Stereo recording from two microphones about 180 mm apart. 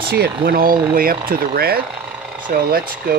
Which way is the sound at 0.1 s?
60° right (ahead or behind).